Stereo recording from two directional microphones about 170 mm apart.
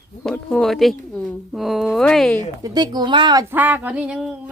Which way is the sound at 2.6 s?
25° right (ahead or behind).